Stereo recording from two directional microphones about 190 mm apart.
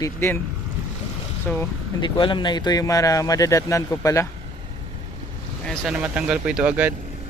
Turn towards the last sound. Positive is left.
turn(degrees=-10)  # may be behind; listen again after turning